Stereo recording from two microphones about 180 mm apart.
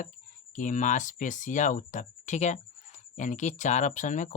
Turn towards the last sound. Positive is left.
turn(degrees=45)  # may be behind; listen again after turning